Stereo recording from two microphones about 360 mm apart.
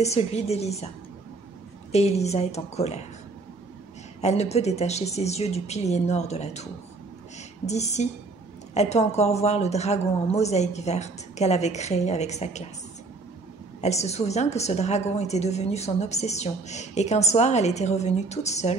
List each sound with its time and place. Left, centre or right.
0.0 s a woman's voice: centre
4.2 s a woman's voice: centre
13.7 s a woman's voice: centre